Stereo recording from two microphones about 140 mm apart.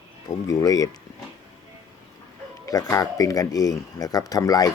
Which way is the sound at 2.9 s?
25° left (ahead or behind).